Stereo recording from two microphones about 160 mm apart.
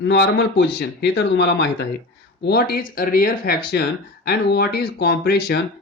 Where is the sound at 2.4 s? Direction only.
80° left.